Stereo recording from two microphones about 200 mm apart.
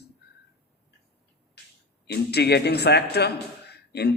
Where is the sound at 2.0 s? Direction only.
55° left (ahead or behind).